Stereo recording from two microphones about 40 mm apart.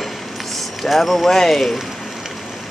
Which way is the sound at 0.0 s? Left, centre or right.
Centre.